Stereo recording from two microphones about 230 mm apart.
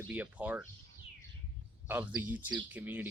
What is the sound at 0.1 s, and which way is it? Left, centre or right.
Speech, centre.